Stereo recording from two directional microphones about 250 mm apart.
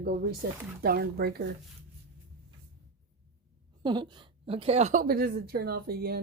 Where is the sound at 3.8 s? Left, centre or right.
Centre.